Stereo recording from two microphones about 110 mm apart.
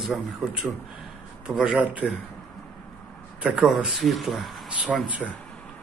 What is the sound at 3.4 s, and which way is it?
A man's voice, 5° right (ahead or behind).